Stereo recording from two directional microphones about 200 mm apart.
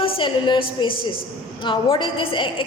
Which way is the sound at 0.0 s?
25° left (ahead or behind).